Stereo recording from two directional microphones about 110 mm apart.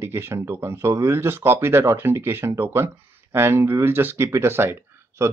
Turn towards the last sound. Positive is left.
turn(degrees=-25)  # may be behind; listen again after turning